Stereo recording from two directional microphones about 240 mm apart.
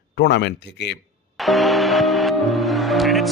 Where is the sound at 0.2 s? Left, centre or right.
Left.